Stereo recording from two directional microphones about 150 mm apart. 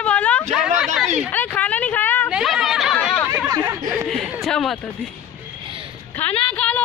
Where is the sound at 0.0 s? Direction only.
10° left (ahead or behind).